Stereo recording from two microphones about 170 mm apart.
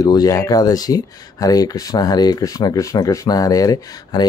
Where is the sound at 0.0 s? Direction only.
20° left (ahead or behind).